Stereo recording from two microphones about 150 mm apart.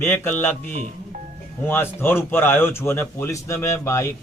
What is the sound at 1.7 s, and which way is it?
Speech, 15° left (ahead or behind).